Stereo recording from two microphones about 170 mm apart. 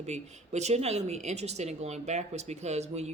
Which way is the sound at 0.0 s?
40° right (ahead or behind).